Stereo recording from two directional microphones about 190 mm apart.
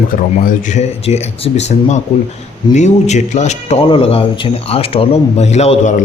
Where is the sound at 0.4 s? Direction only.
35° left (ahead or behind).